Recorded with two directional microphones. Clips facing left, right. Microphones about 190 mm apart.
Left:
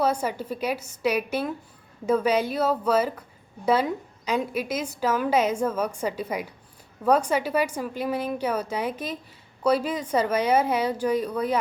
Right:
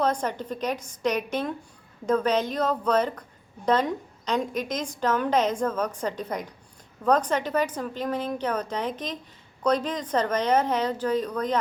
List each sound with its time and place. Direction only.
0.0 s a woman's voice: 10° left (ahead or behind)